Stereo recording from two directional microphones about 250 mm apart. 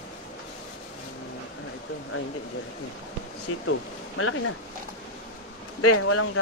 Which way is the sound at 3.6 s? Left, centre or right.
Left.